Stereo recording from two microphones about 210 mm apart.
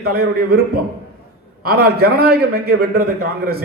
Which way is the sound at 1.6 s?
45° right (ahead or behind).